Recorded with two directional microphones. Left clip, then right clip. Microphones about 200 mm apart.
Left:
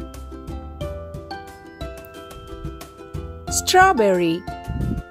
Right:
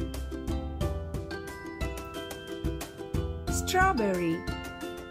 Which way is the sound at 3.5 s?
40° left (ahead or behind).